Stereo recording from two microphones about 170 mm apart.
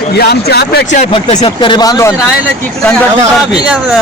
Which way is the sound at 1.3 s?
35° left (ahead or behind).